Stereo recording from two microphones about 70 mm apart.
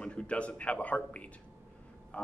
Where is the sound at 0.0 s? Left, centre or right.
Centre.